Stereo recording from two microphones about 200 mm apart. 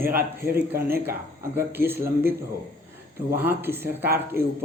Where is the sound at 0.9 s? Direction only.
10° right (ahead or behind).